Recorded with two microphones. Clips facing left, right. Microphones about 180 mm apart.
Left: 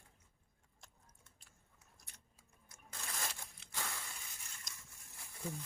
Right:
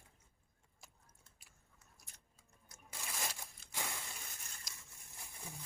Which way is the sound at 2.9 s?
10° right (ahead or behind).